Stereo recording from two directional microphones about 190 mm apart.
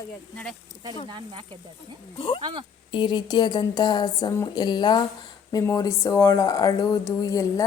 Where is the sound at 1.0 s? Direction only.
25° right (ahead or behind).